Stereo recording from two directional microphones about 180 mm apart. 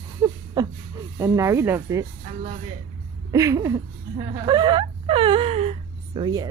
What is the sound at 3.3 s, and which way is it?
Speech, 15° right (ahead or behind).